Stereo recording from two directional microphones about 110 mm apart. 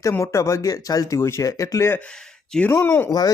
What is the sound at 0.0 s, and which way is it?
Speech, 30° left (ahead or behind).